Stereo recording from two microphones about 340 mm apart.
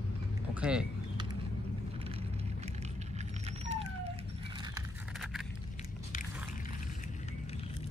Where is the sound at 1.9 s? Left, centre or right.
Centre.